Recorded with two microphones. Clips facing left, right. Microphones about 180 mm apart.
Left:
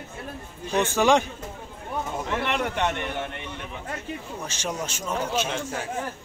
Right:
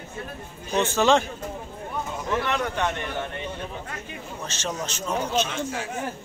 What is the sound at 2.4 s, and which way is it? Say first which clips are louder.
Speech: even; 25° left (ahead or behind).